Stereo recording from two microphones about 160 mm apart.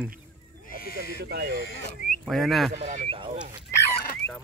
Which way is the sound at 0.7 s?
70° left (ahead or behind).